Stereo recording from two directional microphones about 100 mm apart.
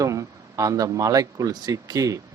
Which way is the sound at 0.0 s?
30° right (ahead or behind).